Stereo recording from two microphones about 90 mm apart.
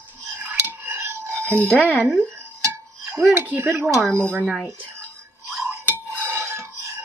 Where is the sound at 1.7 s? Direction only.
20° right (ahead or behind).